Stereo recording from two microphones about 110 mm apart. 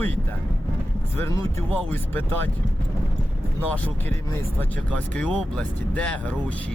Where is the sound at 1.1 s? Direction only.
25° left (ahead or behind).